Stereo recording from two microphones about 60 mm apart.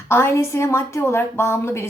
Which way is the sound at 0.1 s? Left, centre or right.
Left.